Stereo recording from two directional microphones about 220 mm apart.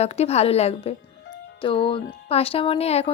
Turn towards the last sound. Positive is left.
turn(degrees=30)  # may be behind; listen again after turning